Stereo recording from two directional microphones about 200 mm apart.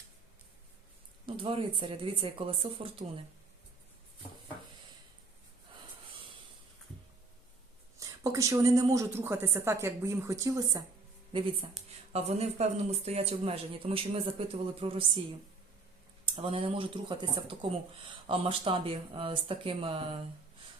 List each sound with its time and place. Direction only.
1.4 s speech: 25° right (ahead or behind)
7.9 s a woman's voice: 15° right (ahead or behind)
12.1 s speech: 35° right (ahead or behind)
16.2 s speech: 25° right (ahead or behind)